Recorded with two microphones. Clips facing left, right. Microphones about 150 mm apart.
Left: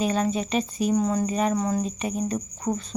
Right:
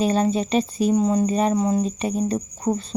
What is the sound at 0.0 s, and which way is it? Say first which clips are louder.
Speech: right 4 dB; 30° right (ahead or behind).